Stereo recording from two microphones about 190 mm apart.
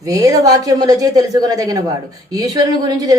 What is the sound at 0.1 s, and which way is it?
A woman's voice, 20° right (ahead or behind).